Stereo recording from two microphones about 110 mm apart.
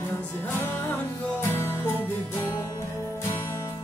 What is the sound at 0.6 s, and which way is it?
Music, 25° left (ahead or behind).